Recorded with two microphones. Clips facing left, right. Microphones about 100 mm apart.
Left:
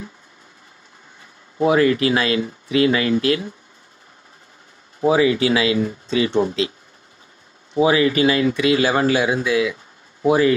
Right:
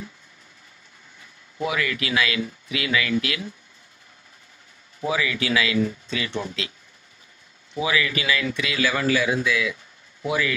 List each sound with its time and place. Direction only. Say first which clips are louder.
1.6 s speech: left 11 dB; 35° left (ahead or behind)
5.0 s speech: left 9 dB; 35° left (ahead or behind)
7.7 s speech: left 9 dB; 35° left (ahead or behind)